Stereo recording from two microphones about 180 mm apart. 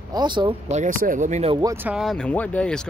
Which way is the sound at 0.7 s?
45° right (ahead or behind).